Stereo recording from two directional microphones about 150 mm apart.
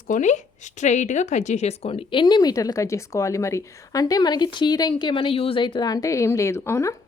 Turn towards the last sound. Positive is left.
turn(degrees=20)  # may be behind; listen again after turning